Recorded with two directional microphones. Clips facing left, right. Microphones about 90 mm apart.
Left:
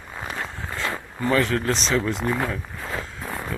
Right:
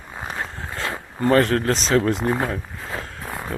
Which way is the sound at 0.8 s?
40° right (ahead or behind).